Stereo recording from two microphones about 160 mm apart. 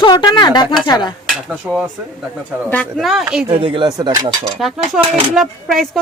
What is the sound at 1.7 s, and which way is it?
Speech, 5° right (ahead or behind).